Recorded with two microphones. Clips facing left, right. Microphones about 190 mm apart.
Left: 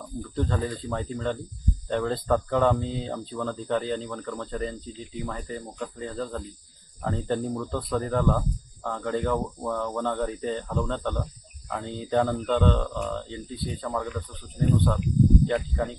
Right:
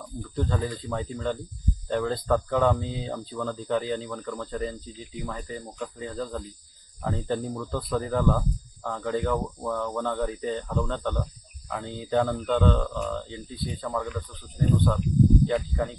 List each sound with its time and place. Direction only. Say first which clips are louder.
0.4 s speech: left 1 dB; centre (ahead or behind)
15.4 s speech: even; 5° left (ahead or behind)